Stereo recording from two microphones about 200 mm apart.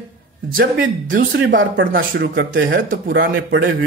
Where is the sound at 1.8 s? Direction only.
45° right (ahead or behind).